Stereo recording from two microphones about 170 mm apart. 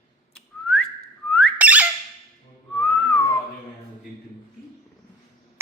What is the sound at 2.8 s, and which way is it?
Whistling, 5° left (ahead or behind).